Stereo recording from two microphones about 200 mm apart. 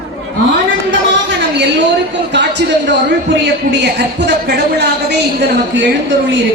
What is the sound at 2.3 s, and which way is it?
A man's voice, 60° right (ahead or behind).